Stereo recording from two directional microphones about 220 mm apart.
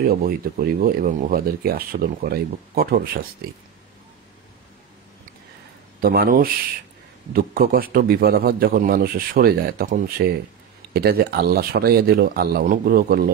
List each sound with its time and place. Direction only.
0.0 s speech: 40° right (ahead or behind)
5.9 s a man's voice: 45° right (ahead or behind)